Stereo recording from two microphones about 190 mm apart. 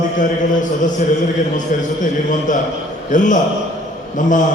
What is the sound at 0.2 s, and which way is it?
A man's voice, 40° left (ahead or behind).